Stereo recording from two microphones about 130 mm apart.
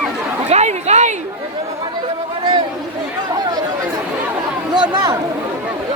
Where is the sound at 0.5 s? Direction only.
60° right (ahead or behind).